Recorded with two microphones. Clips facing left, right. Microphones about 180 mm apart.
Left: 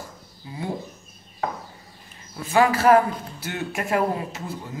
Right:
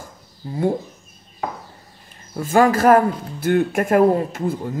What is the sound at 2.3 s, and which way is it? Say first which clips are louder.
Speech: right 4 dB; 45° right (ahead or behind).